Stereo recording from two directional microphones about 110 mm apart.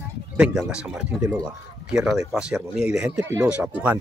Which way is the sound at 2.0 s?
5° right (ahead or behind).